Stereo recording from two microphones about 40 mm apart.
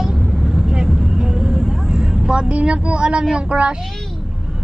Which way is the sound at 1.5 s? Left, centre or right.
Right.